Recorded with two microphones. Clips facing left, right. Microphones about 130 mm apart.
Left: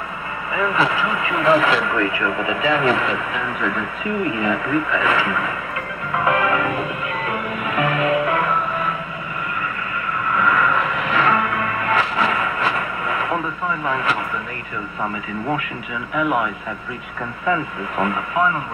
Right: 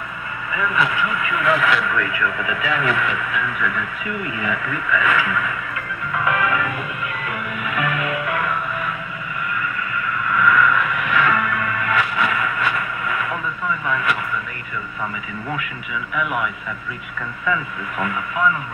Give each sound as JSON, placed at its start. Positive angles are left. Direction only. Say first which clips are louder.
{"t": 0.5, "sound": "speech", "louder": "left 2 dB", "side_deg": 30}
{"t": 6.1, "sound": "music", "louder": "left 2 dB", "side_deg": 30}
{"t": 10.2, "sound": "music", "louder": "right 1 dB", "side_deg": 30}
{"t": 16.2, "sound": "a man's voice", "louder": "left 4 dB", "side_deg": 30}
{"t": 17.5, "sound": "speech", "louder": "left 3 dB", "side_deg": 35}